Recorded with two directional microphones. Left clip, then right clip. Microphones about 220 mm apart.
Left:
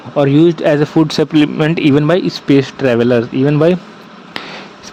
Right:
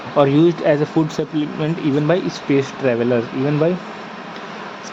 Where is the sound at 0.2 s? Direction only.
50° left (ahead or behind).